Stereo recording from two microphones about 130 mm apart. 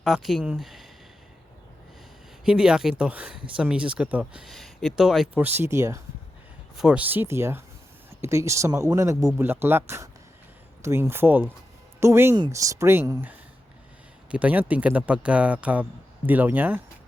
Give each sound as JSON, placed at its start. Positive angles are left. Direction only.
{"t": 0.0, "sound": "speech", "side_deg": 0}
{"t": 2.4, "sound": "speech", "side_deg": -5}
{"t": 5.3, "sound": "speech", "side_deg": -15}
{"t": 6.7, "sound": "speech", "side_deg": -10}
{"t": 14.3, "sound": "speech", "side_deg": -10}